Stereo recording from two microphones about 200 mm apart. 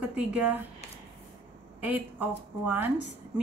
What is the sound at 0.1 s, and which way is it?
Speech, 5° right (ahead or behind).